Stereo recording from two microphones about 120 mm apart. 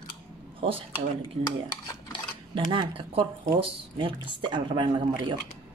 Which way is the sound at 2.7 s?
45° right (ahead or behind).